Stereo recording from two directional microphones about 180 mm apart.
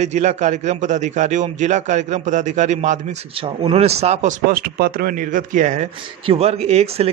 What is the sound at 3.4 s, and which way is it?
Speech, 30° right (ahead or behind).